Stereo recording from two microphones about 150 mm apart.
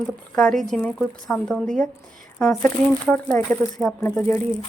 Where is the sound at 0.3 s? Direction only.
5° left (ahead or behind).